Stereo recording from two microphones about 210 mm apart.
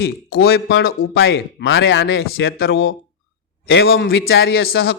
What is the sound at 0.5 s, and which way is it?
Speech, 70° left (ahead or behind).